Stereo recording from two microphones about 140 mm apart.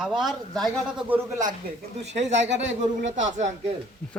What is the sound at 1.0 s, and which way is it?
Speech, 15° right (ahead or behind).